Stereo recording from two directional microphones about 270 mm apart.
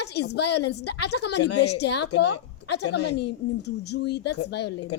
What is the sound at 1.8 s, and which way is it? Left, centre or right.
Speech, left.